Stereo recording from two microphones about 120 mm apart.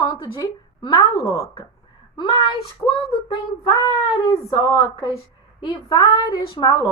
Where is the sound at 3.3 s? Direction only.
40° left (ahead or behind).